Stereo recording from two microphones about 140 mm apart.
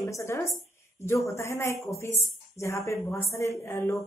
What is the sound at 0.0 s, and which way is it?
A woman's voice, 20° left (ahead or behind).